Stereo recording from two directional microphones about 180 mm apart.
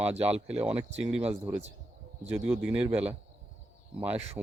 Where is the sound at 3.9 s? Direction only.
10° right (ahead or behind).